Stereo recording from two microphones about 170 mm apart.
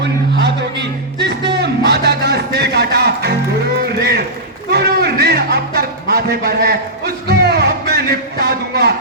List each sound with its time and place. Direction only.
0.3 s music: 85° right
4.7 s a sound: 70° right (ahead or behind)
7.3 s music: 70° right (ahead or behind)